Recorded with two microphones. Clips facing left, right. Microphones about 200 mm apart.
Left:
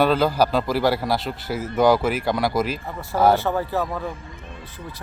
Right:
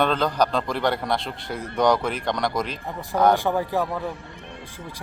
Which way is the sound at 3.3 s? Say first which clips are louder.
Even; 15° right (ahead or behind).